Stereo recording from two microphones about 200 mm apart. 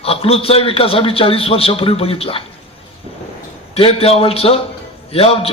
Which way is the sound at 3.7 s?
30° left (ahead or behind).